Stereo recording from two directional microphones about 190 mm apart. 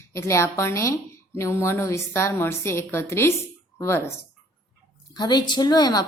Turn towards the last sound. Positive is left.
turn(degrees=20)  # may be behind; listen again after turning